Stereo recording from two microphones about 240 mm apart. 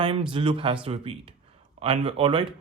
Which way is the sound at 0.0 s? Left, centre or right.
Right.